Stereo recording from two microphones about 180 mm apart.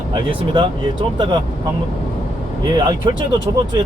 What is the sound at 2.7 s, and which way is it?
Speech, 25° right (ahead or behind).